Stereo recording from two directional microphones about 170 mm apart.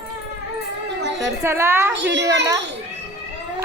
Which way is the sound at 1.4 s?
15° right (ahead or behind).